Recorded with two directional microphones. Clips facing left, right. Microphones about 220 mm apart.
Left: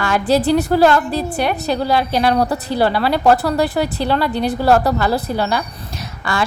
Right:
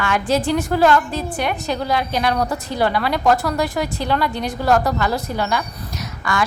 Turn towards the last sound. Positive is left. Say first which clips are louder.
# left 1 dB
turn(degrees=30)  # may be behind; listen again after turning